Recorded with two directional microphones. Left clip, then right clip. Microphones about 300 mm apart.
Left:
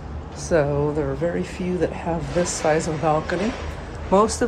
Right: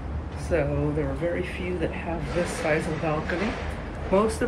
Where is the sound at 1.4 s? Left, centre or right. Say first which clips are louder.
Left 5 dB; centre.